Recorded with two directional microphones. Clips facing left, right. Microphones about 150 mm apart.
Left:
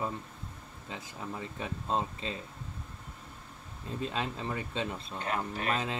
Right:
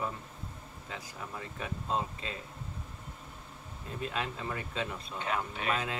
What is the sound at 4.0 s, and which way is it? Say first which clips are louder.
Speech: left 1 dB; 30° left (ahead or behind).